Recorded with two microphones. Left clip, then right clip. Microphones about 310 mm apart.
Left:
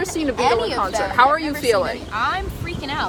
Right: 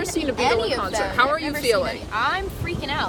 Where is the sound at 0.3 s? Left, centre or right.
Centre.